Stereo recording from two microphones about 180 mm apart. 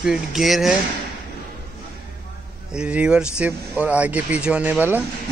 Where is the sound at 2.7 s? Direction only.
5° right (ahead or behind).